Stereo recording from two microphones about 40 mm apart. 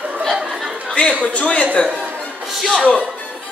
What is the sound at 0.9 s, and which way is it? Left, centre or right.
Speech, left.